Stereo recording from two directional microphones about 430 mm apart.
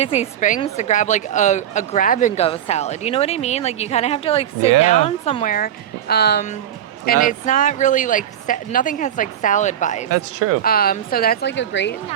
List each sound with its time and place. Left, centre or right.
0.0 s a woman's voice: centre
10.1 s speech: right
10.6 s speech: left